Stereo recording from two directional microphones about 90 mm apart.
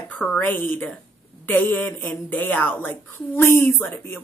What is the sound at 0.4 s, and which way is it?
Speech, 20° left (ahead or behind).